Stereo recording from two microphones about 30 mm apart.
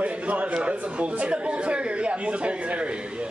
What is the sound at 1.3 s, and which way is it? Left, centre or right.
A man's voice, right.